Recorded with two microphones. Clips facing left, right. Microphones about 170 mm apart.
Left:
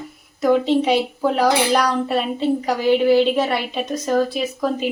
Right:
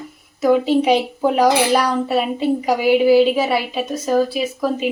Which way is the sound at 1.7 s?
5° right (ahead or behind).